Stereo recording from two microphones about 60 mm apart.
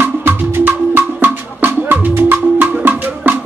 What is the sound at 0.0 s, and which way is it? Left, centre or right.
Music, right.